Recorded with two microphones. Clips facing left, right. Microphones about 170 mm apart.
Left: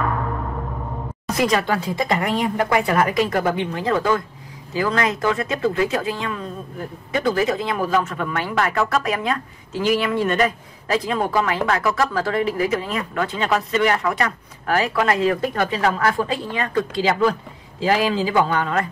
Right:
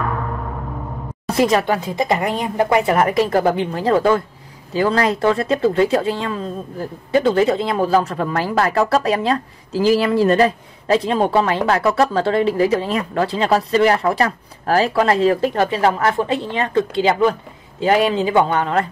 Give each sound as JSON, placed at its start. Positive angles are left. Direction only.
{"t": 1.3, "sound": "speech", "side_deg": -25}